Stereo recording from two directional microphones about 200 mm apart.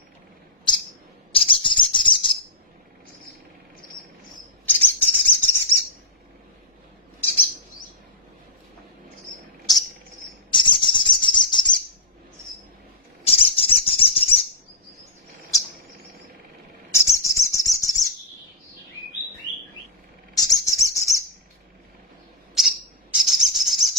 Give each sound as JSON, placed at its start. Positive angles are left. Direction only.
{"t": 1.3, "sound": "bird", "side_deg": 25}
{"t": 4.6, "sound": "bird", "side_deg": 10}
{"t": 10.5, "sound": "bird", "side_deg": 25}
{"t": 13.2, "sound": "bird", "side_deg": 30}
{"t": 16.9, "sound": "bird", "side_deg": 15}
{"t": 20.3, "sound": "bird", "side_deg": 20}
{"t": 22.6, "sound": "bird", "side_deg": 0}